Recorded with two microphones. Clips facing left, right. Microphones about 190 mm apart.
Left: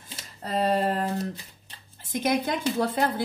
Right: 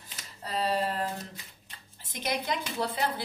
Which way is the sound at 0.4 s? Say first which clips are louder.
Left 5 dB; 50° left (ahead or behind).